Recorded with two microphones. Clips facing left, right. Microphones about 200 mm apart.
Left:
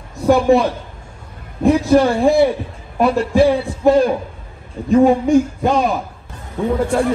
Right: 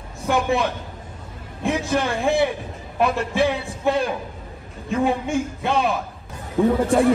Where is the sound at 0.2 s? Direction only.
30° left (ahead or behind).